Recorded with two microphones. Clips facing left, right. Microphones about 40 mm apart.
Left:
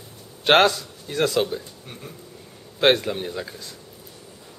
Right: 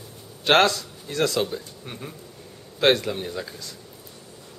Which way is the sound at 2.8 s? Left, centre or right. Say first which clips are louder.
Left 1 dB; centre.